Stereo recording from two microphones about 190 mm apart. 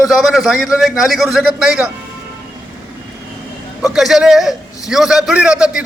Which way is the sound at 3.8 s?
Centre (ahead or behind).